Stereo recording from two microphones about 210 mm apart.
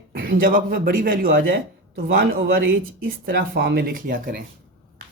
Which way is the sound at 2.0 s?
55° right (ahead or behind).